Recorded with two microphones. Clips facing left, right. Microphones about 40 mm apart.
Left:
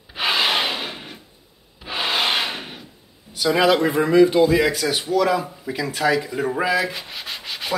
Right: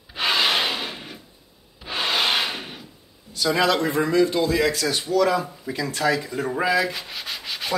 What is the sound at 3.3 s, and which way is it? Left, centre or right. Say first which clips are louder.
Speech: left 3 dB; centre.